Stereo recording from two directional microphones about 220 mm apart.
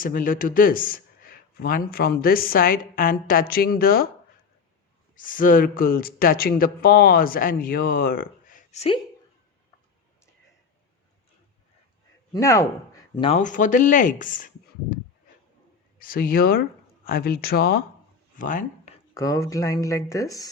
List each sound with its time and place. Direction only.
0.0 s speech: 40° left (ahead or behind)
5.1 s speech: 40° left (ahead or behind)
12.3 s speech: 15° left (ahead or behind); by 14.9 s 40° left (ahead or behind)
16.0 s speech: 40° left (ahead or behind)
18.3 s a sound: 35° left (ahead or behind)
19.1 s speech: 15° left (ahead or behind)